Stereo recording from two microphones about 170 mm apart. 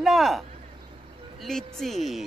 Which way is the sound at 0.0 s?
Centre (ahead or behind).